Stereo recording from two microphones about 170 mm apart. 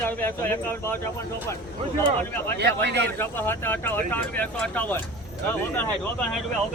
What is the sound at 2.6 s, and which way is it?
Speech, 80° right.